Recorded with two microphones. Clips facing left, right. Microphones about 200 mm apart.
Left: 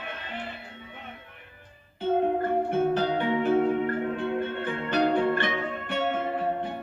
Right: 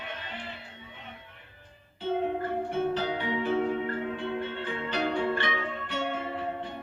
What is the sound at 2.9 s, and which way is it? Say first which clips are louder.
Music: left 5 dB; 55° left (ahead or behind).